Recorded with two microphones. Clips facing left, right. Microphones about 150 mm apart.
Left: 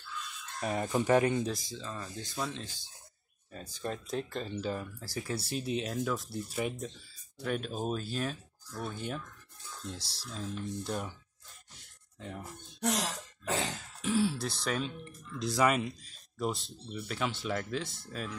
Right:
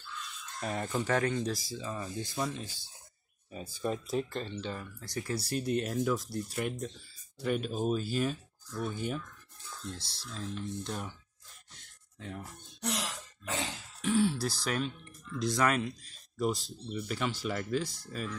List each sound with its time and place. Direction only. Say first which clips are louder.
0.6 s speech: left 3 dB; 10° left (ahead or behind)
1.4 s speech: right 1 dB; 5° right (ahead or behind)
9.9 s speech: left 1 dB; 35° left (ahead or behind)
10.2 s speech: even; 5° left (ahead or behind)
12.8 s throat clearing: left 4 dB; 40° left (ahead or behind)
14.0 s speech: right 2 dB; centre (ahead or behind)